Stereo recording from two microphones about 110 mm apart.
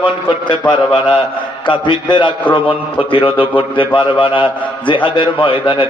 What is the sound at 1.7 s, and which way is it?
Speech, 45° left (ahead or behind).